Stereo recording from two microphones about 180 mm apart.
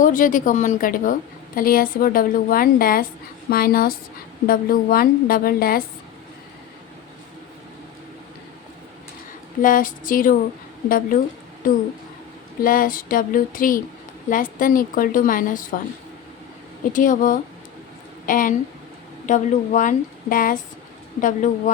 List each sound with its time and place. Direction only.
0.0 s a woman's voice: 45° left (ahead or behind)
9.6 s a woman's voice: 50° left (ahead or behind)
16.9 s a woman's voice: 45° left (ahead or behind)